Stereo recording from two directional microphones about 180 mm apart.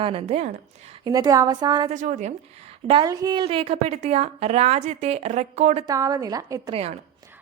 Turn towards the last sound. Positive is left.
turn(degrees=-20)  # may be behind; listen again after turning